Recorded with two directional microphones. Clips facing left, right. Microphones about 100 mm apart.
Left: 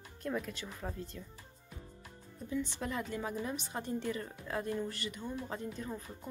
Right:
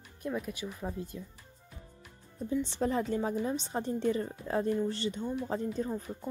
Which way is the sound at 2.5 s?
30° right (ahead or behind).